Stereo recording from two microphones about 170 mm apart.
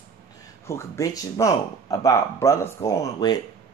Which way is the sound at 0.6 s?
15° left (ahead or behind).